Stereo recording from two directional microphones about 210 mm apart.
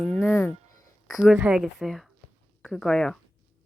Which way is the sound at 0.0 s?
5° left (ahead or behind).